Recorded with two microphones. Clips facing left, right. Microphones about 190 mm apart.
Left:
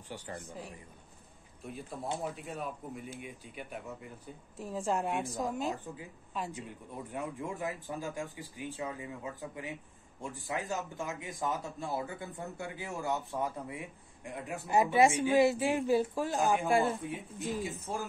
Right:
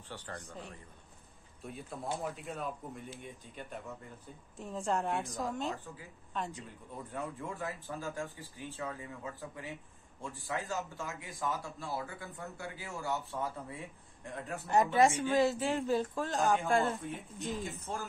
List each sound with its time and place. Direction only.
0.1 s speech: 15° left (ahead or behind)
1.6 s speech: centre (ahead or behind)
3.2 s speech: 15° left (ahead or behind)
4.6 s speech: centre (ahead or behind)
7.1 s speech: 15° left (ahead or behind)
17.4 s speech: centre (ahead or behind)
17.6 s speech: 15° left (ahead or behind)